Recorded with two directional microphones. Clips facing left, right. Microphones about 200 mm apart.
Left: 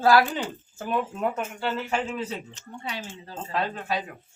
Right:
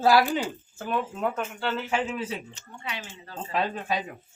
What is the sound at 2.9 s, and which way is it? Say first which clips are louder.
Speech: left 1 dB; 35° left (ahead or behind).